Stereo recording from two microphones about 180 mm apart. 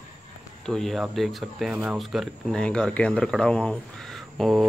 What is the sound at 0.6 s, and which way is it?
Speech, centre (ahead or behind).